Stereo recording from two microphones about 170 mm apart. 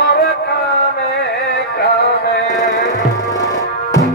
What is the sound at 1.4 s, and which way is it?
Music, 70° left (ahead or behind).